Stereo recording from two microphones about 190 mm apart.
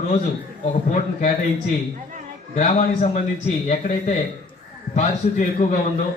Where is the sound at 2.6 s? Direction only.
40° left (ahead or behind).